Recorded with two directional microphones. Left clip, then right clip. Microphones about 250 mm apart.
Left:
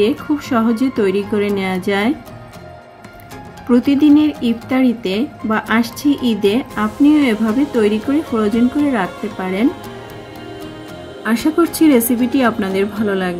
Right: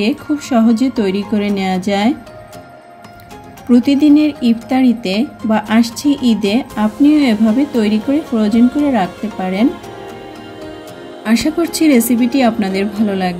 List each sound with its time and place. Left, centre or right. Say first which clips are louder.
0.0 s speech: left 1 dB; right
3.6 s speech: right 1 dB; right
11.2 s speech: even; right